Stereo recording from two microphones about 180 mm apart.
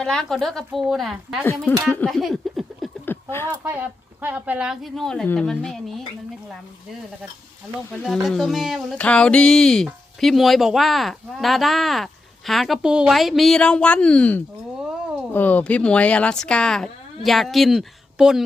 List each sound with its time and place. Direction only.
0.0 s speech: 5° left (ahead or behind)
3.1 s a sound: 10° left (ahead or behind)
3.5 s speech: 10° right (ahead or behind)
7.9 s speech: centre (ahead or behind)